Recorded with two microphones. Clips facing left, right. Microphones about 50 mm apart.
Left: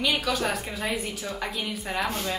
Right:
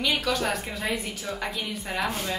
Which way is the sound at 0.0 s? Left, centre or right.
Centre.